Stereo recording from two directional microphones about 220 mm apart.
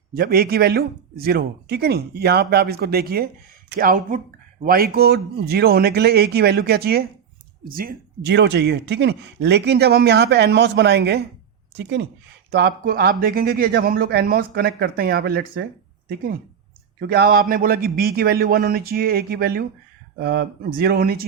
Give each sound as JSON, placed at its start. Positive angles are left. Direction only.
{"t": 0.1, "sound": "speech", "side_deg": -40}
{"t": 17.1, "sound": "speech", "side_deg": -45}